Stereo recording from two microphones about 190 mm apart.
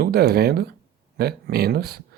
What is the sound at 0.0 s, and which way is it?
Speech, 55° right (ahead or behind).